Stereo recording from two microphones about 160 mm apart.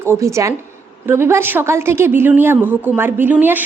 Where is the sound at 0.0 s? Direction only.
15° right (ahead or behind).